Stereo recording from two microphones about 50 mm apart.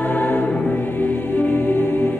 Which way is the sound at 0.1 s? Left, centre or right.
Left.